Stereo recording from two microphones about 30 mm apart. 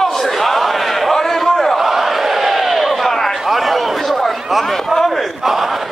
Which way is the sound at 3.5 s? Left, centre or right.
Centre.